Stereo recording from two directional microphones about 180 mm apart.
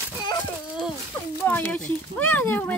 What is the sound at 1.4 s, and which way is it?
Speech, 10° left (ahead or behind).